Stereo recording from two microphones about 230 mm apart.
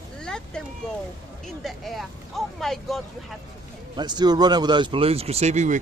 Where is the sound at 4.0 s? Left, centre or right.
Centre.